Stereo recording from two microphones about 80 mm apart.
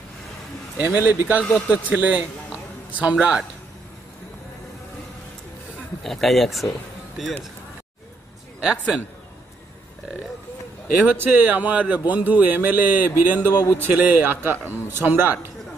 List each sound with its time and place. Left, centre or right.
0.7 s a man's voice: centre
6.0 s speech: centre
11.1 s a man's voice: right